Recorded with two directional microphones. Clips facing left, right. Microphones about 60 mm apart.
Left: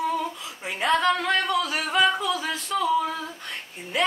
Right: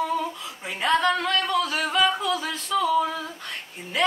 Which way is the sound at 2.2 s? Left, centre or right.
Centre.